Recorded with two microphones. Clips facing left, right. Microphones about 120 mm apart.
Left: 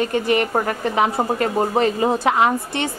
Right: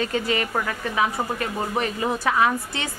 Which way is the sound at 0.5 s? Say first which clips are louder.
Left 5 dB; 35° left (ahead or behind).